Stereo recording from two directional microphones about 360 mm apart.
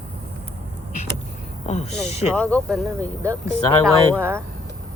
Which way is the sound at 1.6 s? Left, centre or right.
Centre.